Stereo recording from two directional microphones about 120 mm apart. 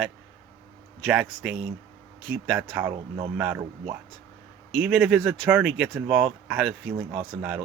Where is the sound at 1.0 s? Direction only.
5° right (ahead or behind).